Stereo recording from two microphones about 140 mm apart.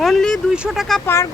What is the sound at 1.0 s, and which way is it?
Speech, 20° left (ahead or behind).